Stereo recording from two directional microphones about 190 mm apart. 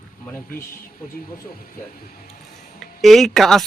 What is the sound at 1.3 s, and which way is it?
Speech, 50° left (ahead or behind).